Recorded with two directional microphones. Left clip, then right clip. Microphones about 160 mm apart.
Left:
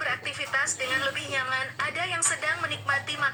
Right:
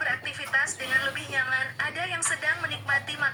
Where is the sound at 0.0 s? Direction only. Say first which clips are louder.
Right 1 dB; 20° left (ahead or behind).